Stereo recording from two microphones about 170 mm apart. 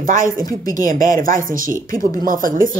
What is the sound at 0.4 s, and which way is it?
Speech, 20° left (ahead or behind).